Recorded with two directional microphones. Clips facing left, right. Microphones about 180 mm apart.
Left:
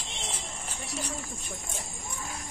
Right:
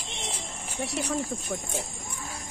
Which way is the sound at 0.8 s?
75° right (ahead or behind).